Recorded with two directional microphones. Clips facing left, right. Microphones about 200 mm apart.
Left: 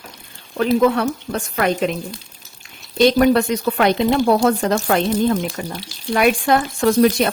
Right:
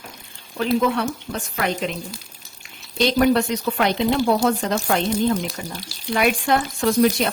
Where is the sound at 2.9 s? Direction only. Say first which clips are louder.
Left 4 dB; 55° left (ahead or behind).